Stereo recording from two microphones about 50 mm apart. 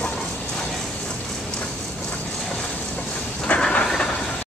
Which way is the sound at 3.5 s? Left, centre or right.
Left.